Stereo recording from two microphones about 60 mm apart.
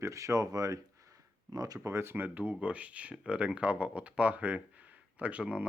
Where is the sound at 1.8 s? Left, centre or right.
Right.